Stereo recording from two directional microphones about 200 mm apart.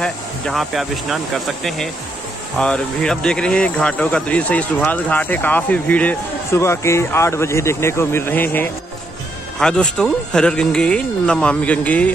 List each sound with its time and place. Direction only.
0.0 s speech: centre (ahead or behind)